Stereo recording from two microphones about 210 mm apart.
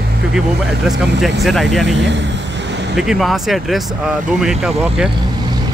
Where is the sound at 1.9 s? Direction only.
55° right (ahead or behind).